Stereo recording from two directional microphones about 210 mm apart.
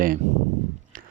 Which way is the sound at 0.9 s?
40° right (ahead or behind).